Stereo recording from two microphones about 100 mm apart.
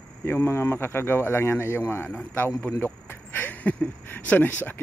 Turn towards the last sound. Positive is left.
turn(degrees=15)  # may be behind; listen again after turning